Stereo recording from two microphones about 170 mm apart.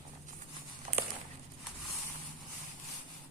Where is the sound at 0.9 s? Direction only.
50° right (ahead or behind).